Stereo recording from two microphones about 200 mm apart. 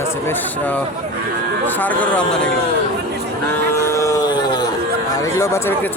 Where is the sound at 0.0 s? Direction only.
10° left (ahead or behind).